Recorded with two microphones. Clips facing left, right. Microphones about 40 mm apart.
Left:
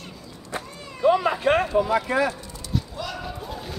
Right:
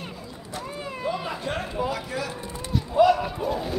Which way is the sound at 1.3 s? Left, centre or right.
Left.